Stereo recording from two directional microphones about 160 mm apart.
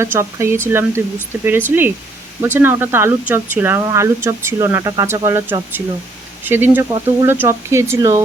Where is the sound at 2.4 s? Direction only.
15° right (ahead or behind).